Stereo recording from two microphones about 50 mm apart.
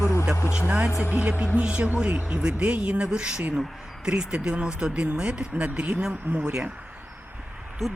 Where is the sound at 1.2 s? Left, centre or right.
Right.